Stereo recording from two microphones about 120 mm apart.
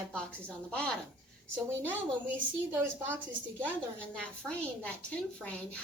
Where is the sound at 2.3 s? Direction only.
15° right (ahead or behind).